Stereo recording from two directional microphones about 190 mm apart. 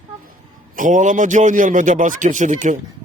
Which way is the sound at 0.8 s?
40° right (ahead or behind).